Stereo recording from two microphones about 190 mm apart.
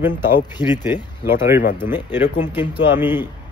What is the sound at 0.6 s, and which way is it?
Speech, 20° left (ahead or behind).